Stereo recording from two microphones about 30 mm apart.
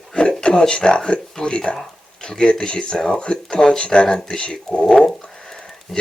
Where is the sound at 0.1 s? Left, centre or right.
Left.